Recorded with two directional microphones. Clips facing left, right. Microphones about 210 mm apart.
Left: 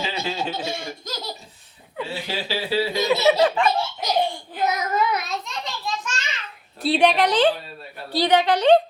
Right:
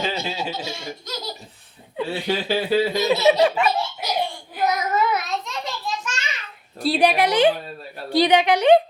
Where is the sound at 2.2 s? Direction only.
50° right (ahead or behind).